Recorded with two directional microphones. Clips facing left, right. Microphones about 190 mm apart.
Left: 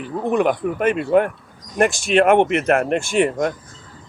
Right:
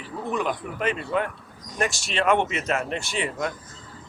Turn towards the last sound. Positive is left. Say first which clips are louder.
# left 10 dB
turn(degrees=50)  # may be behind; listen again after turning